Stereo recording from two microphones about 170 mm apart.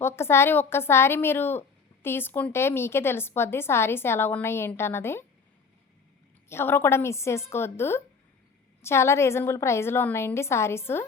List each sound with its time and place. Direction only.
0.0 s a woman's voice: 15° left (ahead or behind)
6.5 s a woman's voice: 15° left (ahead or behind)